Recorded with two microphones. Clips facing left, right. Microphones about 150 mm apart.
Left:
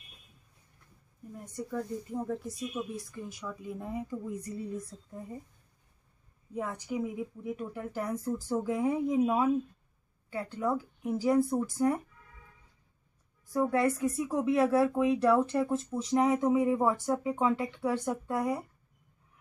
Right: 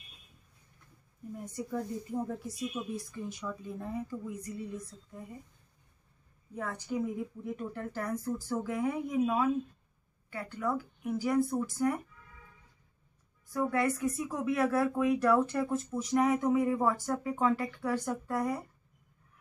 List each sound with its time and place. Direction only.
1.3 s speech: 5° right (ahead or behind); by 4.4 s 20° left (ahead or behind)
4.4 s speech: 30° left (ahead or behind)
6.5 s a woman's voice: 15° left (ahead or behind)
13.5 s speech: 30° left (ahead or behind)